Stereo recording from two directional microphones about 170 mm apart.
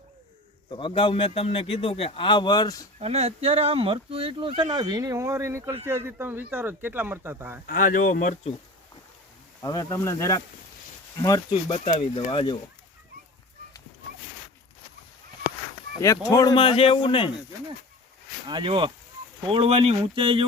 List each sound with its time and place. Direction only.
0.7 s a man's voice: 30° left (ahead or behind)
3.0 s speech: 40° right (ahead or behind); by 7.6 s 15° right (ahead or behind)
7.7 s speech: 55° left (ahead or behind)
9.6 s speech: 20° left (ahead or behind)
11.7 s a man's voice: 30° left (ahead or behind)
16.3 s a man's voice: 20° left (ahead or behind)
16.6 s a man's voice: 35° left (ahead or behind)
18.4 s speech: 30° right (ahead or behind)